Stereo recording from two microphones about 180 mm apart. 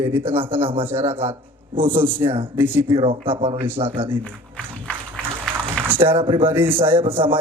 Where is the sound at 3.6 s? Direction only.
10° right (ahead or behind).